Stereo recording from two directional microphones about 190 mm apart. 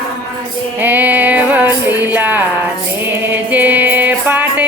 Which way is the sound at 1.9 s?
10° right (ahead or behind).